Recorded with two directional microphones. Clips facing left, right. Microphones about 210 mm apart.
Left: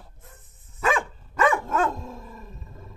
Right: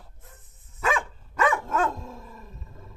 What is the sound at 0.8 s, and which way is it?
Dog, 40° left (ahead or behind).